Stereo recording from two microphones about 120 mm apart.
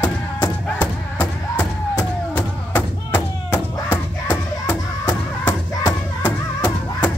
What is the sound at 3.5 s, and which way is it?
Music, 20° left (ahead or behind).